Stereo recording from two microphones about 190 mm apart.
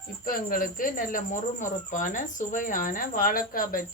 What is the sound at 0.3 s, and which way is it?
Speech, 50° left (ahead or behind).